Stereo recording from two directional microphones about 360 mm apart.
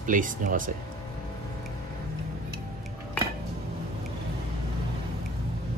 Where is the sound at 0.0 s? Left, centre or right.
Right.